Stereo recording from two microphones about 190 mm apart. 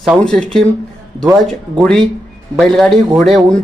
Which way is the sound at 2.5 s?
5° left (ahead or behind).